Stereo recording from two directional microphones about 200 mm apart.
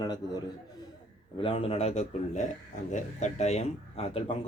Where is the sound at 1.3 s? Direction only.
25° left (ahead or behind).